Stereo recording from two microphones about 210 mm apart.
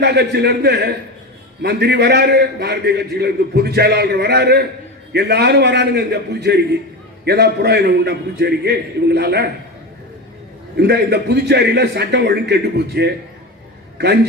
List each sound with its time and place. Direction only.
0.0 s a man's voice: 50° right (ahead or behind)
10.8 s a man's voice: 50° right (ahead or behind)